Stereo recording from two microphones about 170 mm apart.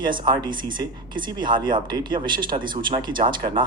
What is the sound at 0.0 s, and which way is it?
Speech, 25° right (ahead or behind).